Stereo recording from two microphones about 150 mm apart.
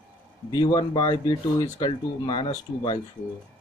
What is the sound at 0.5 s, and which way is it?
Speech, 30° left (ahead or behind).